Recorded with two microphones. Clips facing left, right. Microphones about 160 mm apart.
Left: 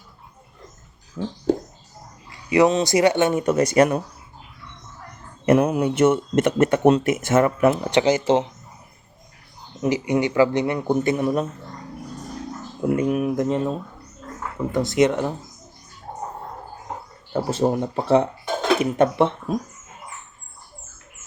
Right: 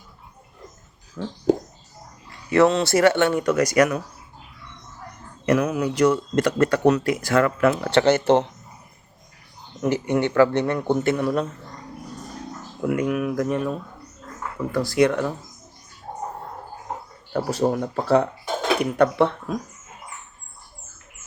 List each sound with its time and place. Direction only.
1.2 s speech: 20° left (ahead or behind)
2.5 s speech: 15° left (ahead or behind)
5.5 s speech: 30° left (ahead or behind); by 8.4 s 10° left (ahead or behind)
9.8 s speech: 10° left (ahead or behind)
12.8 s speech: 30° left (ahead or behind)
17.3 s speech: 25° left (ahead or behind)